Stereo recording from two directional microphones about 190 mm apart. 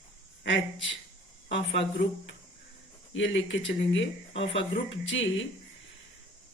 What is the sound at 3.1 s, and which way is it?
Speech, 80° left.